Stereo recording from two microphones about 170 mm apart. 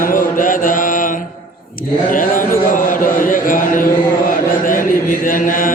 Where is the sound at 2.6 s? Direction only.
50° left (ahead or behind).